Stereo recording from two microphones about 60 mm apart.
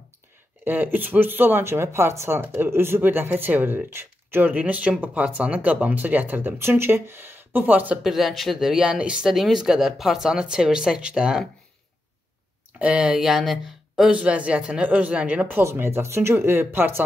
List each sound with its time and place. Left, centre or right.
0.7 s speech: right
6.6 s speech: right
8.0 s speech: centre
9.3 s speech: centre
12.7 s speech: right
13.1 s speech: centre
14.1 s speech: right
15.7 s speech: right